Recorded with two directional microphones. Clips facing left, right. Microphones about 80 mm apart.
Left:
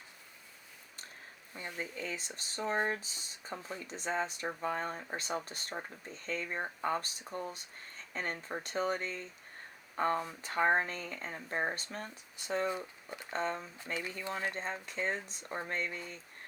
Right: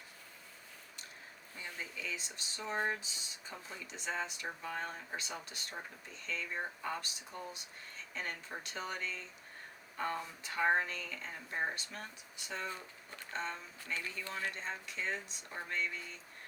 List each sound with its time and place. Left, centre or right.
1.5 s speech: left
12.6 s speech: left
13.3 s speech: left
14.3 s speech: left
14.5 s speech: left